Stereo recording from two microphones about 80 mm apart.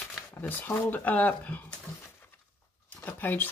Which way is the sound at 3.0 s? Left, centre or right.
Left.